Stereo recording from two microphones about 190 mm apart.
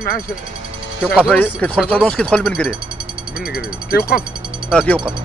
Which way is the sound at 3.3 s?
55° left (ahead or behind).